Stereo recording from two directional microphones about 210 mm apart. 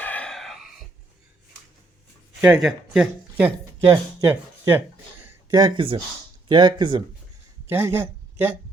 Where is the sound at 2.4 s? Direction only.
5° right (ahead or behind).